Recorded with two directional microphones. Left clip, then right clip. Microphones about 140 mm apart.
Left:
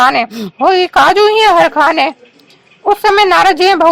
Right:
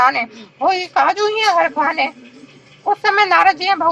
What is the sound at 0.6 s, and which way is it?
Speech, 60° left (ahead or behind).